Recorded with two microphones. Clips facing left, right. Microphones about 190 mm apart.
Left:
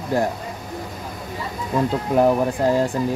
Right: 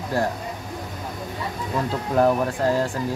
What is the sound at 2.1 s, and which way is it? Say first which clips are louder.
Speech: left 2 dB; 15° left (ahead or behind).